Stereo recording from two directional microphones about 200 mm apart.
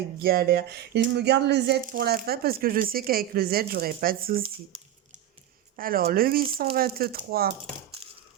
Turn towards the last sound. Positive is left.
turn(degrees=-50)  # may be behind; listen again after turning